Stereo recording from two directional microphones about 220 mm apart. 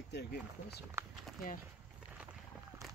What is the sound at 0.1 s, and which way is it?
Speech, 50° left (ahead or behind).